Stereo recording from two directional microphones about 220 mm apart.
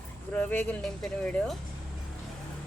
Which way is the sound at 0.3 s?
10° left (ahead or behind).